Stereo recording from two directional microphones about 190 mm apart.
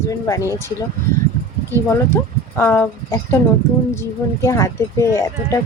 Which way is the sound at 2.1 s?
15° left (ahead or behind).